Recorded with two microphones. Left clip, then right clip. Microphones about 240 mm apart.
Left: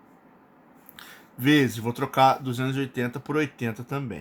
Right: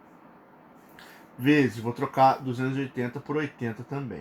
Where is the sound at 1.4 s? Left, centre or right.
Left.